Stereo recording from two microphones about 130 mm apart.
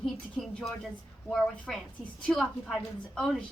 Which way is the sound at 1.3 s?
5° left (ahead or behind).